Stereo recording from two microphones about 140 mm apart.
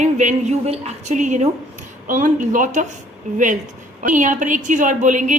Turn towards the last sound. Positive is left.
turn(degrees=-65)  # may be behind; listen again after turning